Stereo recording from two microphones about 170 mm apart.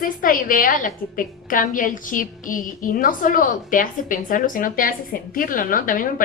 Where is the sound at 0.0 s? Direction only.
55° left (ahead or behind).